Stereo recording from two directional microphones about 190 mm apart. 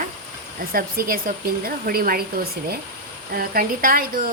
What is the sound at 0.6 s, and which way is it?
A woman's voice, 50° right (ahead or behind).